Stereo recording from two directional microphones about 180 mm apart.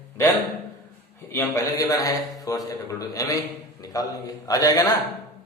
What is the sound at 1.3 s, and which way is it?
A man's voice, 15° left (ahead or behind).